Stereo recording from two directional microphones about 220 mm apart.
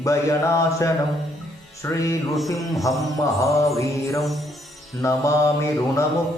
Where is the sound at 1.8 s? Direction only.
15° left (ahead or behind).